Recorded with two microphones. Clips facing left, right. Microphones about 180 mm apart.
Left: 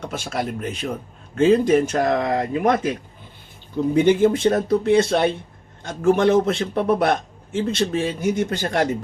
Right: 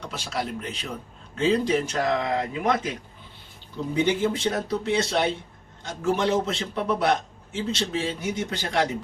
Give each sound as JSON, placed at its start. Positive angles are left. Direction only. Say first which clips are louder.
{"t": 0.0, "sound": "a man's voice", "louder": "left 5 dB", "side_deg": 50}
{"t": 3.9, "sound": "a man's voice", "louder": "left 7 dB", "side_deg": 50}